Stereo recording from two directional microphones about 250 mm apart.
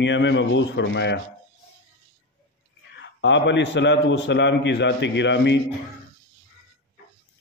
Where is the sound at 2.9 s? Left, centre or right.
Left.